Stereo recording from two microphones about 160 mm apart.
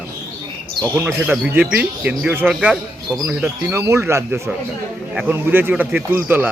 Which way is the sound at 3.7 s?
15° right (ahead or behind).